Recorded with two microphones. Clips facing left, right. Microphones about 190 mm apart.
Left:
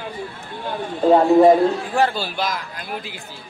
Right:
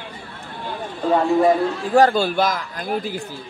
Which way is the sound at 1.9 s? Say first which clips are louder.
Right 5 dB; 45° right (ahead or behind).